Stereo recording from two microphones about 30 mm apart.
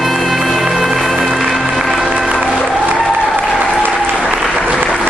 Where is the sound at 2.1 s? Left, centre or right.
Right.